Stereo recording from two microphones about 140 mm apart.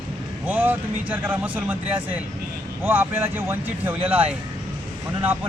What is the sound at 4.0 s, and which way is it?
Speech, 45° right (ahead or behind).